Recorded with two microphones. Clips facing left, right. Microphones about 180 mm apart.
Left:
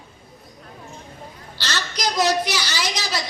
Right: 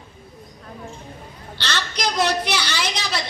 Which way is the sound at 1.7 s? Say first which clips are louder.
Right 1 dB; 60° right (ahead or behind).